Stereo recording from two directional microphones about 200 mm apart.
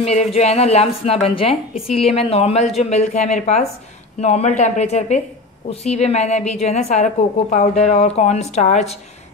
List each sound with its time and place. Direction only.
0.0 s a woman's voice: 35° left (ahead or behind)